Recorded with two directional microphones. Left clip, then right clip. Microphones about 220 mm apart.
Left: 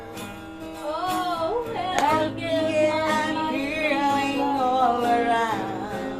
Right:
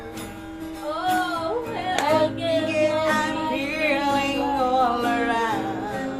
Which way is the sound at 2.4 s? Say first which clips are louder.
Even; 5° right (ahead or behind).